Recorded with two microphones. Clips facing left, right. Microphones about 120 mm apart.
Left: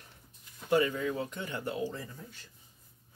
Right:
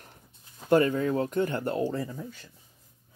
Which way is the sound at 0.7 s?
50° right (ahead or behind).